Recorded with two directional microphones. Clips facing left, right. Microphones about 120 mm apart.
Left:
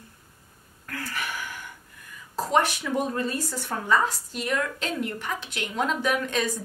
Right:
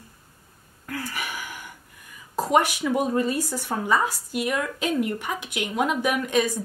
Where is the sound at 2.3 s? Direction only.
15° right (ahead or behind).